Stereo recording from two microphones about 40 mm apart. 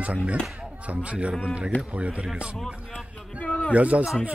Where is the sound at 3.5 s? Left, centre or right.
Left.